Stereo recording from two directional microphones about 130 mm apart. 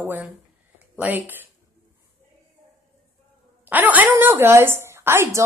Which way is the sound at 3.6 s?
15° right (ahead or behind).